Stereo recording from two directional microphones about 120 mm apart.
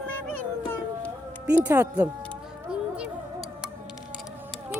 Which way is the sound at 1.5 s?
15° right (ahead or behind).